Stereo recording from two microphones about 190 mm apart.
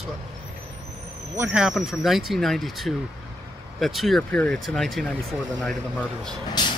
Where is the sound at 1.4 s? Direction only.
5° right (ahead or behind).